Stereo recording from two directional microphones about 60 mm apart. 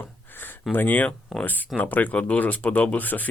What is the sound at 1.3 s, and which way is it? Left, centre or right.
Speech, centre.